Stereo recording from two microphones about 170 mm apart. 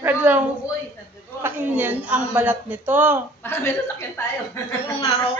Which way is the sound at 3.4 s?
15° left (ahead or behind).